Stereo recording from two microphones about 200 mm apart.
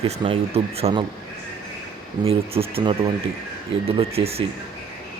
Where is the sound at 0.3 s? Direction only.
30° right (ahead or behind).